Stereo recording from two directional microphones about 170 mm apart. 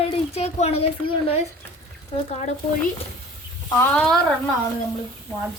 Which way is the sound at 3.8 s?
5° left (ahead or behind).